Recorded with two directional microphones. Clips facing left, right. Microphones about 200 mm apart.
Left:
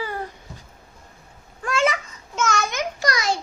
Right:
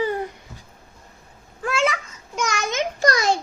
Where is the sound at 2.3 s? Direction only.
15° right (ahead or behind).